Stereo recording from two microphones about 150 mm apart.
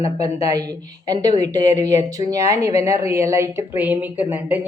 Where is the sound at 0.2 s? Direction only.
25° right (ahead or behind).